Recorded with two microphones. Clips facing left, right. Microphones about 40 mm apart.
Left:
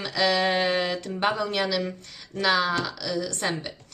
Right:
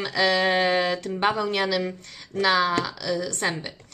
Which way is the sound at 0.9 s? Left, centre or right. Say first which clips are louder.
Right 2 dB; centre.